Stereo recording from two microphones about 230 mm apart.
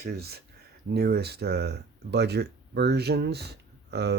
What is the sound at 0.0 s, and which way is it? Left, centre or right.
Speech, right.